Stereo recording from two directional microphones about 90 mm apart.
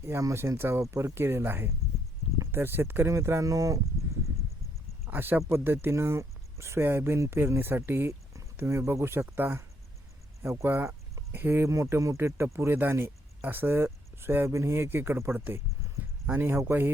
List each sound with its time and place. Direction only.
0.0 s speech: 35° right (ahead or behind)
5.0 s speech: 20° right (ahead or behind)